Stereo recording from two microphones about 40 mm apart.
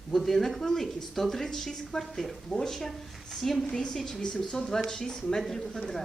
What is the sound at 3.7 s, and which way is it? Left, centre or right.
Speech, centre.